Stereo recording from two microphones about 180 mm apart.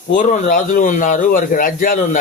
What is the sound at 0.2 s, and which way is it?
Speech, 45° left (ahead or behind).